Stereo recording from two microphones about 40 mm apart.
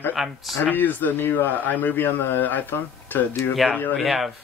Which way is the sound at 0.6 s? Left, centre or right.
Left.